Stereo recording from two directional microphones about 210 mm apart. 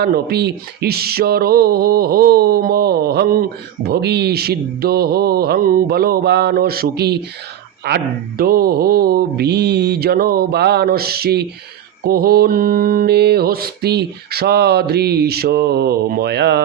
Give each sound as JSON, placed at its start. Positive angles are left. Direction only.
{"t": 0.0, "sound": "mantra", "side_deg": -50}